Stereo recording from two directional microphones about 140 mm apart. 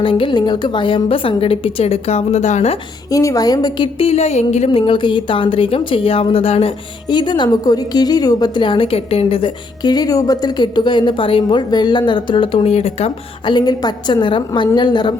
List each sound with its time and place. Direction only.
0.0 s speech: 35° left (ahead or behind); by 2.7 s 55° left (ahead or behind)
3.1 s a woman's voice: 25° left (ahead or behind)
3.9 s a woman's voice: 45° left (ahead or behind)
4.9 s speech: 35° left (ahead or behind)